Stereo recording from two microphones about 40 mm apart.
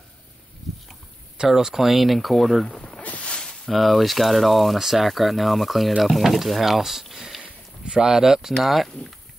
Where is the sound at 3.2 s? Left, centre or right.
Left.